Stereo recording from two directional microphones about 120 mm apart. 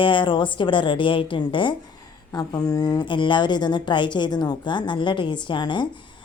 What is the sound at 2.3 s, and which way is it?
Speech, 35° left (ahead or behind).